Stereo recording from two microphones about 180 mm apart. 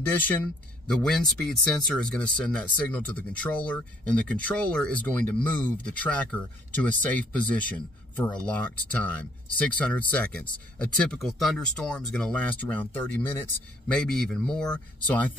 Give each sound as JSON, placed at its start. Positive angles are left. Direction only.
{"t": 0.1, "sound": "speech", "side_deg": 10}